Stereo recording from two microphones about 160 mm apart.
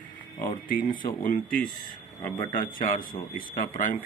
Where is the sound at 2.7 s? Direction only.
60° left (ahead or behind).